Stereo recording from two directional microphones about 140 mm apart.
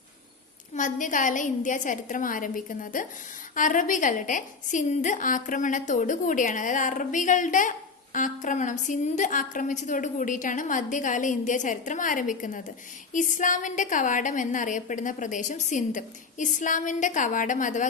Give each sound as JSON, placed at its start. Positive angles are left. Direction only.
{"t": 0.8, "sound": "a woman's voice", "side_deg": 65}